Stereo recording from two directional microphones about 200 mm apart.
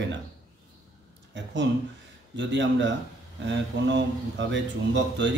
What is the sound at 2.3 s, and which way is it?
Speech, 60° right (ahead or behind).